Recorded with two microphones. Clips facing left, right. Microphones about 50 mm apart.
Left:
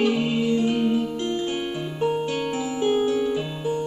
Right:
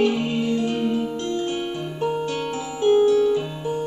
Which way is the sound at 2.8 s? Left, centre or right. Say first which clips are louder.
Right 6 dB; left.